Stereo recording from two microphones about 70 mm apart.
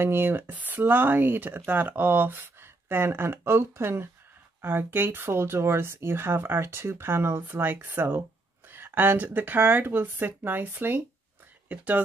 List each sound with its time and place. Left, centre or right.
0.0 s speech: right